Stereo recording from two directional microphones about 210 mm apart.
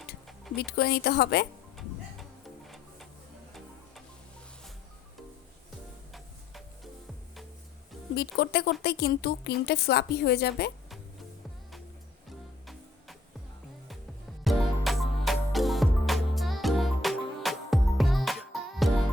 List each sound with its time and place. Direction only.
0.5 s a woman's voice: 50° left (ahead or behind)
2.6 s music: centre (ahead or behind)
8.1 s a woman's voice: 50° left (ahead or behind)
14.4 s music: centre (ahead or behind)